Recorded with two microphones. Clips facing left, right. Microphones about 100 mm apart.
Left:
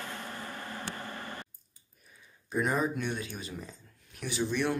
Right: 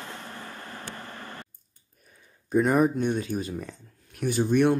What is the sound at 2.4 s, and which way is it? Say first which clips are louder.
Speech: right 8 dB; 50° right (ahead or behind).